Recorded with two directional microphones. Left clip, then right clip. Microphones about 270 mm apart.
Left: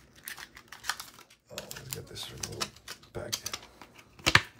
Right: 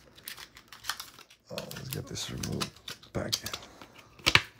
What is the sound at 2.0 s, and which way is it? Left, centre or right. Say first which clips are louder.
Typing: right 6 dB; right.